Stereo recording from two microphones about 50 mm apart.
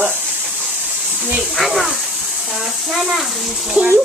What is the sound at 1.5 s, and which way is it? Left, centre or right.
Speech, centre.